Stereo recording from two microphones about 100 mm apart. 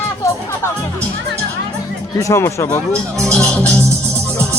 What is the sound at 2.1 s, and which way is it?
Speech, 30° left (ahead or behind).